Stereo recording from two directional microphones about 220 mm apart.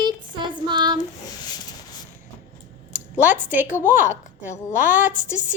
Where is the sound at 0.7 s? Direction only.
20° right (ahead or behind).